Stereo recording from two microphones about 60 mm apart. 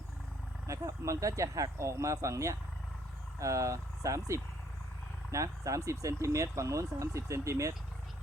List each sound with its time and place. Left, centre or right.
0.7 s speech: right
5.3 s speech: right